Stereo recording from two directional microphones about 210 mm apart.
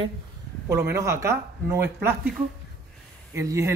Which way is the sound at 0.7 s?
15° right (ahead or behind).